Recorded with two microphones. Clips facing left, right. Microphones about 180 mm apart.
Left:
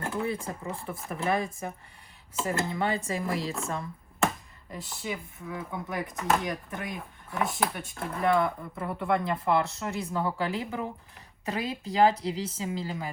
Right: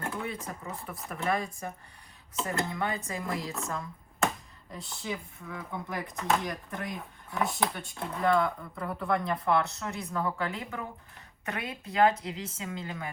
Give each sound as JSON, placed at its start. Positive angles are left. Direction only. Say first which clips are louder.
{"t": 0.2, "sound": "speech", "louder": "left 5 dB", "side_deg": 30}
{"t": 1.1, "sound": "speech", "louder": "left 2 dB", "side_deg": 0}
{"t": 2.7, "sound": "speech", "louder": "left 4 dB", "side_deg": 30}
{"t": 4.7, "sound": "speech", "louder": "left 1 dB", "side_deg": 0}
{"t": 8.7, "sound": "speech", "louder": "left 2 dB", "side_deg": 25}